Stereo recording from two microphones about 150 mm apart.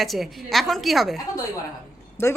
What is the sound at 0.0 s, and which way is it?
A woman's voice, centre (ahead or behind).